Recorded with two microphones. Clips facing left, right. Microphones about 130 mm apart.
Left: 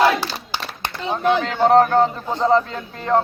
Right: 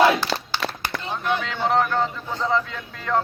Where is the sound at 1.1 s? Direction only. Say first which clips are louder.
Left 8 dB; 35° left (ahead or behind).